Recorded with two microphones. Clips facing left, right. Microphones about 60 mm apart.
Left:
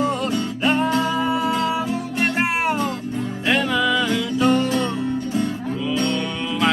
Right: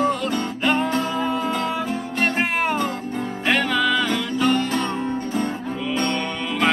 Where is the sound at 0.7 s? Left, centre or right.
Right.